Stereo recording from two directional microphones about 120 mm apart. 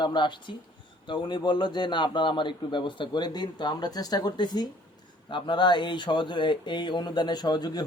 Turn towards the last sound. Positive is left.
turn(degrees=35)  # may be behind; listen again after turning